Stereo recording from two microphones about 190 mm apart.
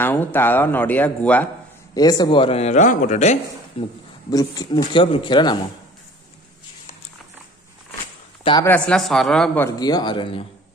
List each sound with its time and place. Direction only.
0.0 s speech: 10° left (ahead or behind)
2.0 s speech: 20° left (ahead or behind)
4.3 s speech: 20° left (ahead or behind)
8.6 s speech: 5° left (ahead or behind)
9.7 s speech: 20° left (ahead or behind)